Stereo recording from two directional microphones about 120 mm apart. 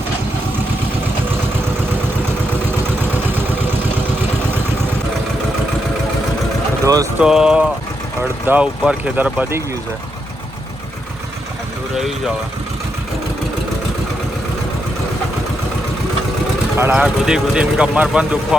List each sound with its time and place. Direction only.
6.8 s vehicle: 25° right (ahead or behind)
7.2 s speech: 5° right (ahead or behind)
11.9 s speech: 5° right (ahead or behind)
16.7 s speech: 15° right (ahead or behind)